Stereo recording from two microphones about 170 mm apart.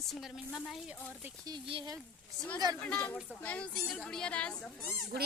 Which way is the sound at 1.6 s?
30° right (ahead or behind).